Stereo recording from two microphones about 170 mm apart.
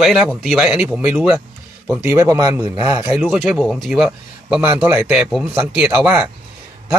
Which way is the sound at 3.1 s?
Centre (ahead or behind).